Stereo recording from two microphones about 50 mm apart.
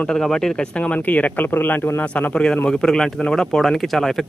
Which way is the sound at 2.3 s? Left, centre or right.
Centre.